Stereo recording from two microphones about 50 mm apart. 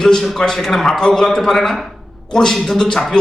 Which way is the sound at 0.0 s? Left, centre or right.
Centre.